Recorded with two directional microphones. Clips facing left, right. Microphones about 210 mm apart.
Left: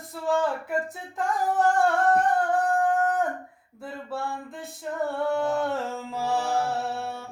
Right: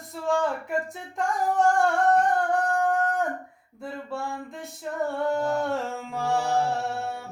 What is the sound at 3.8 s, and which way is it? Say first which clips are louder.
Speech: even; centre (ahead or behind).